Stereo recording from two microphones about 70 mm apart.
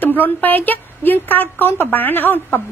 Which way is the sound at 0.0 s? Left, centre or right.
Left.